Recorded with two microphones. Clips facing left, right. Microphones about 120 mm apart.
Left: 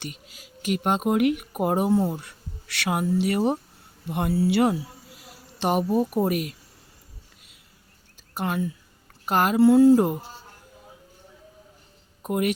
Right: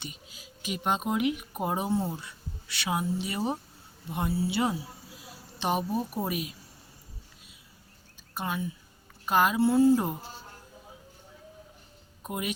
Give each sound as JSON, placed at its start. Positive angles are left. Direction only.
{"t": 0.0, "sound": "speech", "side_deg": 70}
{"t": 4.0, "sound": "a sound", "side_deg": 75}
{"t": 6.2, "sound": "speech", "side_deg": 65}
{"t": 8.4, "sound": "speech", "side_deg": 80}
{"t": 9.2, "sound": "speech", "side_deg": 65}
{"t": 12.2, "sound": "speech", "side_deg": 65}